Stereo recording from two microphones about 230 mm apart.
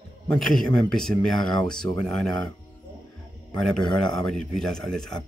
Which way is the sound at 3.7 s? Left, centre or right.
Centre.